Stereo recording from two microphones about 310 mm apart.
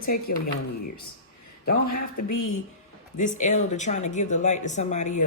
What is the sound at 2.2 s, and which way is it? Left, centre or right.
Speech, left.